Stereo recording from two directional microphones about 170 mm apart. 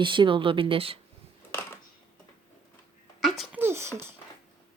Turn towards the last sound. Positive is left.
turn(degrees=-15)  # may be behind; listen again after turning